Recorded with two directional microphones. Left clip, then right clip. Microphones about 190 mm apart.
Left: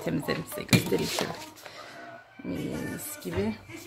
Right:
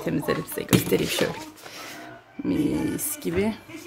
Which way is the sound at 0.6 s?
20° right (ahead or behind).